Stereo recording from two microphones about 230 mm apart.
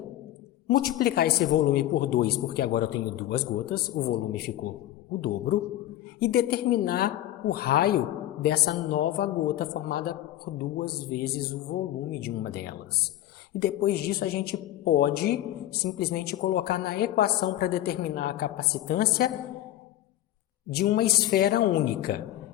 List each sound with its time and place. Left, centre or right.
0.7 s a man's voice: left
20.7 s a woman's voice: left